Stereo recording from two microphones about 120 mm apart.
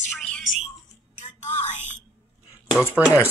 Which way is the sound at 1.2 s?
85° left.